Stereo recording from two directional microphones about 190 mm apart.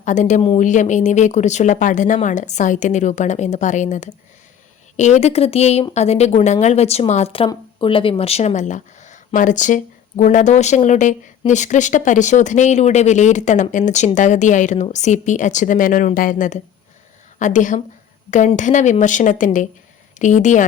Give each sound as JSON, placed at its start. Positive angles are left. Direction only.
{"t": 0.0, "sound": "speech", "side_deg": 40}